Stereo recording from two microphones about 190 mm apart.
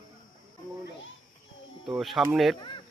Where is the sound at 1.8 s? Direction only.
Centre (ahead or behind).